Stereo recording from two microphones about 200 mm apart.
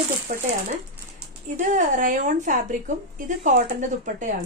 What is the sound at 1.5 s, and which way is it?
Speech, 40° right (ahead or behind).